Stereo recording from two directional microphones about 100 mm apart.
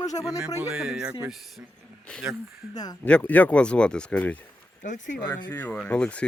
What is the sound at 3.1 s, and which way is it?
Speech, 15° left (ahead or behind).